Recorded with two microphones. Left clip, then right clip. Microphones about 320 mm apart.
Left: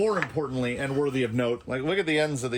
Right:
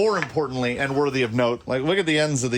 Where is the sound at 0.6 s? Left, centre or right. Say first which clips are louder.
Right 4 dB; centre.